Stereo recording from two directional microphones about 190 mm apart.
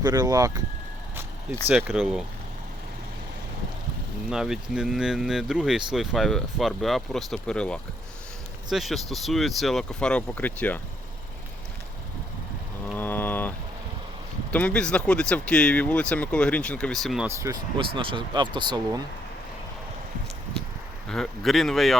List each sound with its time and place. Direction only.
0.0 s speech: 20° right (ahead or behind)
1.6 s speech: 5° right (ahead or behind)
4.3 s speech: 5° right (ahead or behind)
13.0 s ratchet: 10° left (ahead or behind)
14.5 s speech: 5° left (ahead or behind)
17.2 s speech: 15° right (ahead or behind)
17.7 s speech: 25° right (ahead or behind)
21.1 s speech: centre (ahead or behind)